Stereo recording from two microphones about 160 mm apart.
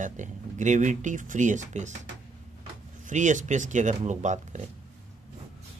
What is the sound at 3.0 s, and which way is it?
Speech, 50° right (ahead or behind).